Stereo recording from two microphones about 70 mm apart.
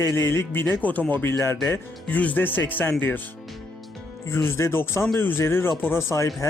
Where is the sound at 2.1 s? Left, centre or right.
Left.